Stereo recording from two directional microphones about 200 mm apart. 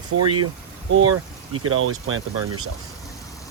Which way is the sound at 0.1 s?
65° right (ahead or behind).